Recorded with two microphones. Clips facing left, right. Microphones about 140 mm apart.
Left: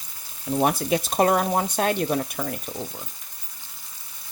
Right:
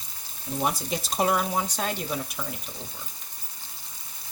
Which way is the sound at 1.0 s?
50° left (ahead or behind).